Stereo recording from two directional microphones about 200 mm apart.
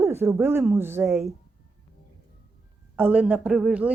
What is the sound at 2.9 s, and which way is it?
Speech, 5° right (ahead or behind).